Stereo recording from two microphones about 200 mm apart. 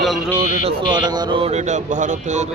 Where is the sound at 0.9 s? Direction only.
20° right (ahead or behind).